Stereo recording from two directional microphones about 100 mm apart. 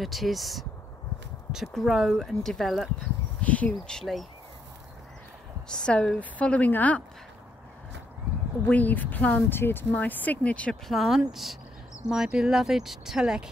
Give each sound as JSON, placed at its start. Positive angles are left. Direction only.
{"t": 0.0, "sound": "speech", "side_deg": 0}
{"t": 3.0, "sound": "speech", "side_deg": 15}
{"t": 5.7, "sound": "a woman's voice", "side_deg": 10}
{"t": 8.6, "sound": "a woman's voice", "side_deg": 15}
{"t": 10.9, "sound": "speech", "side_deg": 0}